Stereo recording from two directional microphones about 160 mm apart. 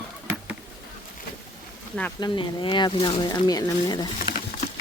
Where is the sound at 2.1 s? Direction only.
30° left (ahead or behind).